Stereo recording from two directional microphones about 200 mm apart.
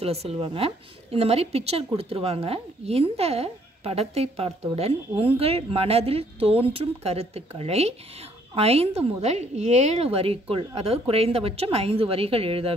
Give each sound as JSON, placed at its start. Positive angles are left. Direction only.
{"t": 0.0, "sound": "a woman's voice", "side_deg": -30}